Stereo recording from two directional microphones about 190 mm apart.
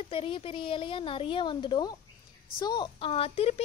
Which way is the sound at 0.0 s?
30° left (ahead or behind).